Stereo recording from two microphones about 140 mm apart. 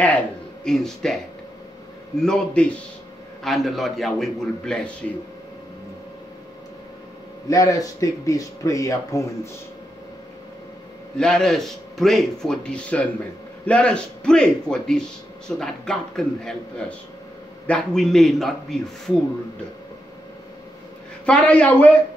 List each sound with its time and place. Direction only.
0.7 s a man's voice: 5° left (ahead or behind)
7.4 s speech: 25° left (ahead or behind)
11.1 s a man's voice: 5° left (ahead or behind)
17.6 s a man's voice: 5° left (ahead or behind)
21.3 s speech: 10° left (ahead or behind)